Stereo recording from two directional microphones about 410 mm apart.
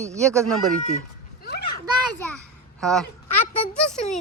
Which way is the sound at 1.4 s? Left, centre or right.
Left.